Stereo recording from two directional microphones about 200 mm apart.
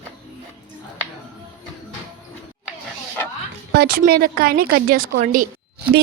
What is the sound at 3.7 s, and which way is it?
A woman's voice, 50° right (ahead or behind).